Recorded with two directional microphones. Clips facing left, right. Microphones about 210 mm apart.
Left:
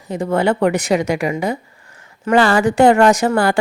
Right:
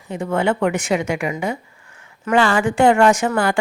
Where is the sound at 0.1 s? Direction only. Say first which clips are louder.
Left 3 dB; 35° left (ahead or behind).